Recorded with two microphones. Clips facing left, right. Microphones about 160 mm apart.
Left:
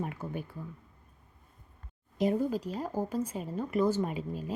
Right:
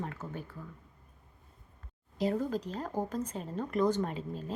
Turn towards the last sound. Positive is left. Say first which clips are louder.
# left 2 dB
turn(degrees=10)  # may be behind; listen again after turning